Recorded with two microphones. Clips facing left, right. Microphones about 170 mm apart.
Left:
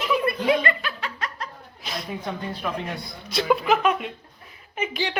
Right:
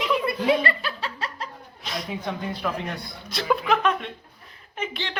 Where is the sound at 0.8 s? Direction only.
35° right (ahead or behind).